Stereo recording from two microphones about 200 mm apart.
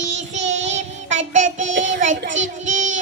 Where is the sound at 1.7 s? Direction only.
70° right (ahead or behind).